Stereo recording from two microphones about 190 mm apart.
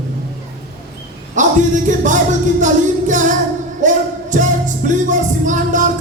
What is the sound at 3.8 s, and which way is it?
Music, 40° right (ahead or behind).